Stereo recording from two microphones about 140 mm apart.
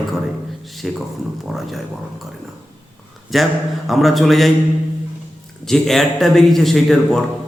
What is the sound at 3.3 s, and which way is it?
A man's voice, centre (ahead or behind).